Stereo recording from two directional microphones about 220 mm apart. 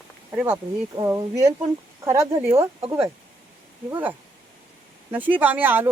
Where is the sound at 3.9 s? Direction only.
10° right (ahead or behind).